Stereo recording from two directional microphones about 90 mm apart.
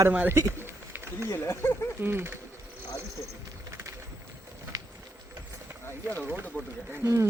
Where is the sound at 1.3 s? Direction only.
25° left (ahead or behind).